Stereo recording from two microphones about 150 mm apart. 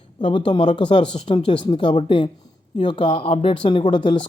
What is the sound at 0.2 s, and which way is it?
Speech, 35° left (ahead or behind).